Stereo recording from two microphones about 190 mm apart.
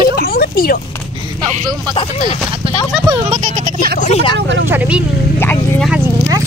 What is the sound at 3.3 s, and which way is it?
Speech, 45° right (ahead or behind).